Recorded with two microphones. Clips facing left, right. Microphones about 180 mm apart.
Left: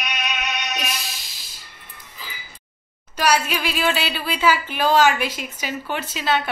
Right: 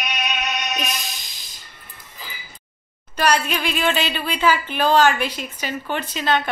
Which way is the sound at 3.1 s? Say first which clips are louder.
Even; 10° left (ahead or behind).